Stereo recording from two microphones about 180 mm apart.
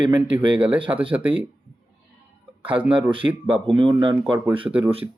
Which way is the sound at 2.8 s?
10° right (ahead or behind).